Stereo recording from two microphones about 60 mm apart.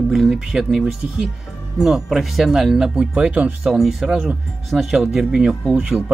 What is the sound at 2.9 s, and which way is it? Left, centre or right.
Speech, right.